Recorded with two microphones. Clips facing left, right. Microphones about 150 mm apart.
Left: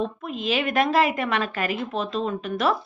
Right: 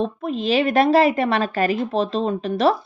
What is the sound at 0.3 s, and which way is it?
A woman's voice, 35° right (ahead or behind).